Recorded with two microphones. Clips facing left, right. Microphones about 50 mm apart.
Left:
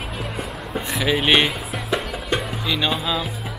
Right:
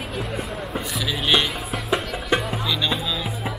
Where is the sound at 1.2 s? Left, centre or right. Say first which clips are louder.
Left 2 dB; left.